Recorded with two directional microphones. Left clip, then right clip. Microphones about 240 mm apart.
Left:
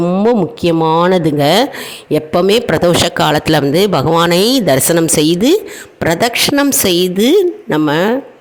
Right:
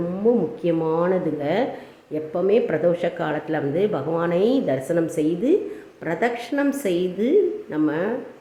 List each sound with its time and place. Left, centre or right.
0.3 s speech: left